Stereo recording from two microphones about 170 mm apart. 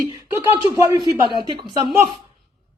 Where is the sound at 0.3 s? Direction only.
25° left (ahead or behind).